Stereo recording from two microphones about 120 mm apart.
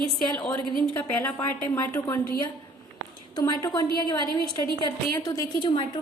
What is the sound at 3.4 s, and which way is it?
A woman's voice, 30° left (ahead or behind).